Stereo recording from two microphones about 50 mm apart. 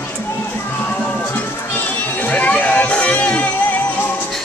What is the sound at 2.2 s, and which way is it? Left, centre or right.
Music, left.